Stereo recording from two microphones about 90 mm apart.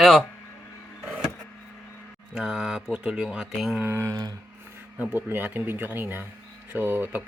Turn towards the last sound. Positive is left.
turn(degrees=-20)  # may be behind; listen again after turning